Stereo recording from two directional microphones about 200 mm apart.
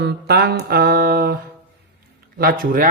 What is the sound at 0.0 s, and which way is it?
Speech, 55° right (ahead or behind).